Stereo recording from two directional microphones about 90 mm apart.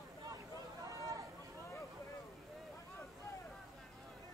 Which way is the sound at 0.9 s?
35° right (ahead or behind).